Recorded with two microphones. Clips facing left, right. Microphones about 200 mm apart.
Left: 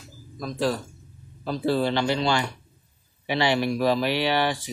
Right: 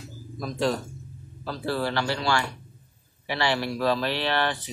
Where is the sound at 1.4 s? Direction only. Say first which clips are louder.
Left 5 dB; 20° left (ahead or behind).